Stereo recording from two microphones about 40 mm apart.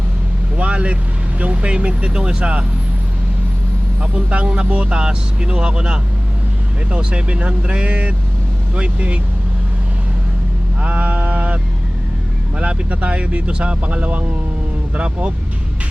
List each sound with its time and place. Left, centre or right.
0.5 s vehicle: right
1.4 s speech: right
4.0 s speech: right
10.8 s a sound: right
12.5 s speech: right